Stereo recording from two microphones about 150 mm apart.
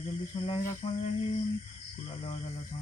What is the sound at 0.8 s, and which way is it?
Mantra, 45° left (ahead or behind).